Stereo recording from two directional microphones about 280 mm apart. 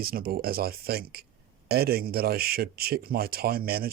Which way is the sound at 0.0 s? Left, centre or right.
Right.